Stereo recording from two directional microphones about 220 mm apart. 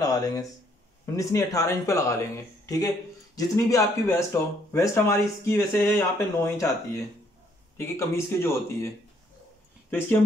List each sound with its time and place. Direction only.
0.0 s a sound: 15° left (ahead or behind)
1.0 s speech: 15° left (ahead or behind)
8.4 s speech: 10° left (ahead or behind)